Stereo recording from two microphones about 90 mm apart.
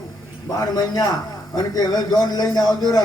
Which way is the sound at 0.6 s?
45° left (ahead or behind).